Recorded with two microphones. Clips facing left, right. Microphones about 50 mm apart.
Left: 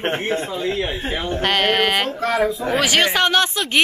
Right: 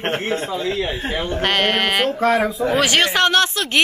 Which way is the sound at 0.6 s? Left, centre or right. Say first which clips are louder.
Even; centre.